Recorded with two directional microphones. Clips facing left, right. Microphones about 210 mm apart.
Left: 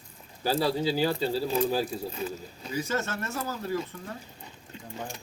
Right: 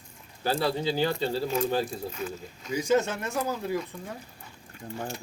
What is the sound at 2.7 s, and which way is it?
Speech, 15° right (ahead or behind).